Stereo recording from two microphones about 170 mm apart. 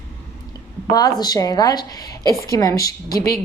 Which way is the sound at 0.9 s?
20° left (ahead or behind).